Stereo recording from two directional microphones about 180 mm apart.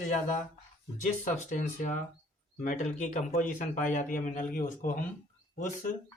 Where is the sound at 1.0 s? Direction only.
40° left (ahead or behind).